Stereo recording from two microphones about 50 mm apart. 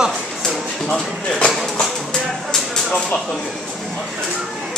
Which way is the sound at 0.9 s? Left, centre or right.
Centre.